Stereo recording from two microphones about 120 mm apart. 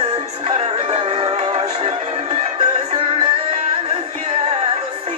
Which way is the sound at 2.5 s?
50° right (ahead or behind).